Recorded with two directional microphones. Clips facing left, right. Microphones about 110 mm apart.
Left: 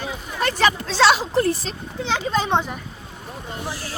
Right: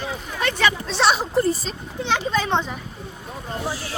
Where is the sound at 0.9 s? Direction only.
90° left.